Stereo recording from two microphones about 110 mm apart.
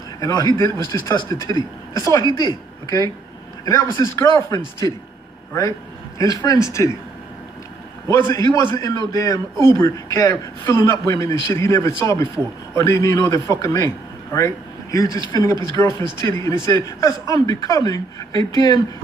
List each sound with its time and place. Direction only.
0.2 s a man's voice: 30° left (ahead or behind)
8.3 s a man's voice: 30° left (ahead or behind)